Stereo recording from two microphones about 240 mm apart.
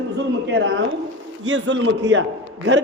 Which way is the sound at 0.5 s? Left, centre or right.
Right.